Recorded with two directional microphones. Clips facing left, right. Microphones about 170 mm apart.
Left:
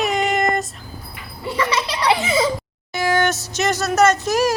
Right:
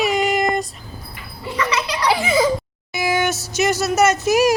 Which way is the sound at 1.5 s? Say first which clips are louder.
Even; 30° left (ahead or behind).